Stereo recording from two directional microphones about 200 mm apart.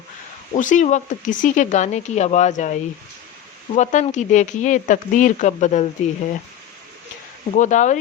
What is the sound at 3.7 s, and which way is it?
Speech, 35° left (ahead or behind).